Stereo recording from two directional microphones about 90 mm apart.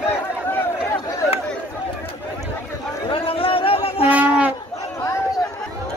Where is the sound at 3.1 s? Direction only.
85° left.